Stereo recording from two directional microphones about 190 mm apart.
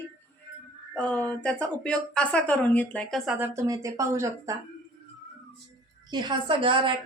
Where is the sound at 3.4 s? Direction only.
15° right (ahead or behind).